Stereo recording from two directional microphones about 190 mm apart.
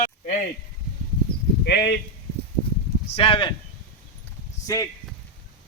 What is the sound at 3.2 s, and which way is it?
Speech, 30° left (ahead or behind).